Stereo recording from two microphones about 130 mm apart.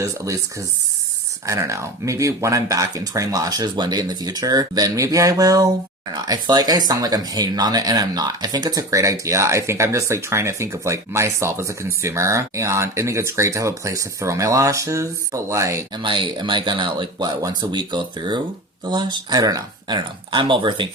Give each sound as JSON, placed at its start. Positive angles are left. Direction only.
{"t": 1.5, "sound": "speech", "side_deg": -25}
{"t": 16.0, "sound": "speech", "side_deg": -40}